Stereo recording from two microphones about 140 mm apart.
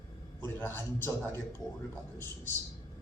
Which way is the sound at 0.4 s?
15° left (ahead or behind).